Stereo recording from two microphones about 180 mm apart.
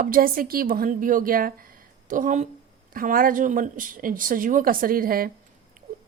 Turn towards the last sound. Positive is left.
turn(degrees=-55)  # may be behind; listen again after turning